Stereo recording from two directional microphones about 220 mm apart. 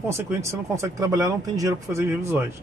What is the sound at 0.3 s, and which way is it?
Speech, 15° right (ahead or behind).